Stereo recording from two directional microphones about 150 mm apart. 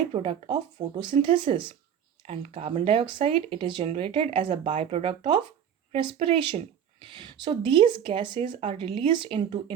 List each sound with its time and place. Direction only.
0.1 s speech: 35° right (ahead or behind)